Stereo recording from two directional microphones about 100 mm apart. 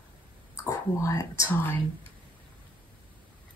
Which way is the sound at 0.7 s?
30° left (ahead or behind).